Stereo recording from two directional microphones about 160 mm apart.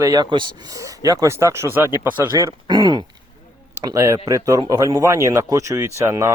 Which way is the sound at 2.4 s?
25° right (ahead or behind).